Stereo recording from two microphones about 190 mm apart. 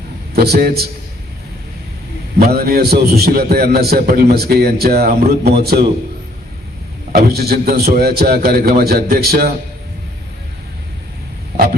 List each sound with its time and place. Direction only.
0.3 s a man's voice: 55° right (ahead or behind)
2.4 s a man's voice: 55° right (ahead or behind)
7.2 s a man's voice: 55° right (ahead or behind)